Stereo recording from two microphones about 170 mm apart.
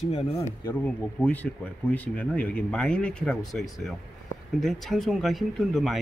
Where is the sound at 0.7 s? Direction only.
10° left (ahead or behind).